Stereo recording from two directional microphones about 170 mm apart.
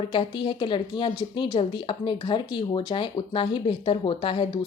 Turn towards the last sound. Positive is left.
turn(degrees=30)  # may be behind; listen again after turning